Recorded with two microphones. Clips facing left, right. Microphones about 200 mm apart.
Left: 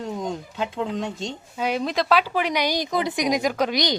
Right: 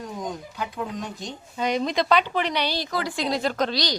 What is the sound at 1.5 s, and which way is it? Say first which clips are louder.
Speech: even; 5° left (ahead or behind).